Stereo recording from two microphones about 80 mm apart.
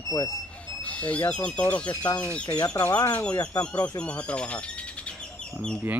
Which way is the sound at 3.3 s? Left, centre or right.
Left.